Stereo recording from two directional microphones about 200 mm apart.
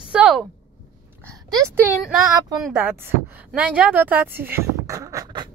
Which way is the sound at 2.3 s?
20° right (ahead or behind).